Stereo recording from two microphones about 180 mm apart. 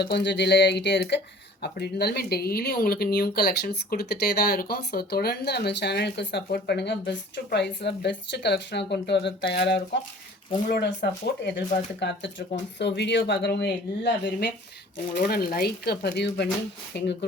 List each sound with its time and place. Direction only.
0.0 s speech: 70° left (ahead or behind)